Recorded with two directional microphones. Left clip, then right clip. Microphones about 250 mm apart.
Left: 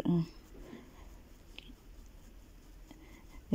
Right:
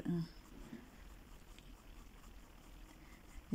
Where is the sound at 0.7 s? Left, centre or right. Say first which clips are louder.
Left 2 dB; centre.